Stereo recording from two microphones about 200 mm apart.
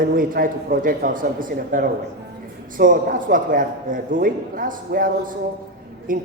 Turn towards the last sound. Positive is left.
turn(degrees=-40)  # may be behind; listen again after turning